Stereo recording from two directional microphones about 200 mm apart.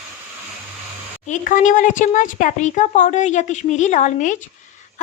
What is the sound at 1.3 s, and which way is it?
A woman's voice, 40° left (ahead or behind).